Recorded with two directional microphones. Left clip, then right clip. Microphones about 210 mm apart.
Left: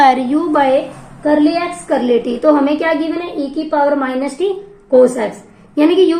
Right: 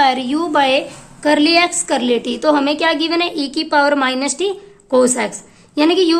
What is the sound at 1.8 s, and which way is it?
A woman's voice, 25° right (ahead or behind).